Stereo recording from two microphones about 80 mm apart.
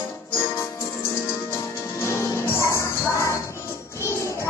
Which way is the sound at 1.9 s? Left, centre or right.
Left.